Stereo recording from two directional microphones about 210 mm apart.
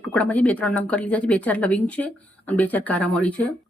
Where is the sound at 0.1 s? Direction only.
5° left (ahead or behind).